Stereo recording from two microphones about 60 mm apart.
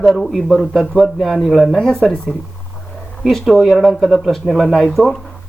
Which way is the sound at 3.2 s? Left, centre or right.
Centre.